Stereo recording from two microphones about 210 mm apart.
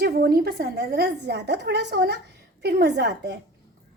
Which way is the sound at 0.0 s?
50° right (ahead or behind).